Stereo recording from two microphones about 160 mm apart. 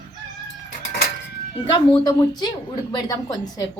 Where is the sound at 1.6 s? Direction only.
35° left (ahead or behind).